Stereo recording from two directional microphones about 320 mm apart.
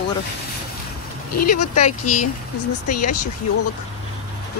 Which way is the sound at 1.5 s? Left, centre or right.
Left.